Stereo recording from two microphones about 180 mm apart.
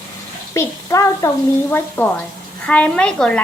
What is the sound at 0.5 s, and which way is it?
A woman's voice, 15° left (ahead or behind).